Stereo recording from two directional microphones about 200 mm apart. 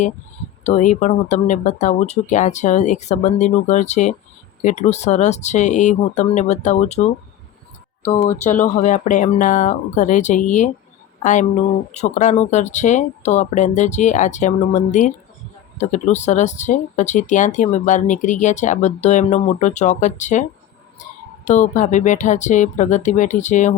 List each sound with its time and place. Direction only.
0.6 s speech: 40° left (ahead or behind)
8.4 s speech: 35° left (ahead or behind)
21.4 s speech: 40° left (ahead or behind)